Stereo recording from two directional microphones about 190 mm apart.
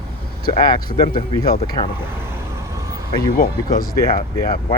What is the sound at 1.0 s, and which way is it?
Speech, 30° left (ahead or behind).